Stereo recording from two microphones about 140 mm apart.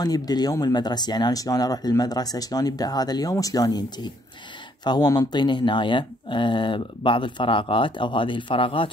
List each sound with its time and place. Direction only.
0.0 s speech: 30° left (ahead or behind)